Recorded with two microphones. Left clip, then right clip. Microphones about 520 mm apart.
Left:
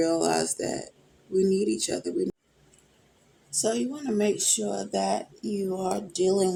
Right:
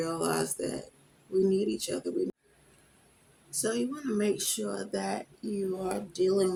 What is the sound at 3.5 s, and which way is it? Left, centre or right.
Speech, right.